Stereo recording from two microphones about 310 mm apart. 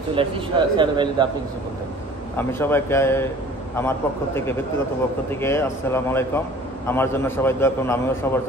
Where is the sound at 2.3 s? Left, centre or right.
Centre.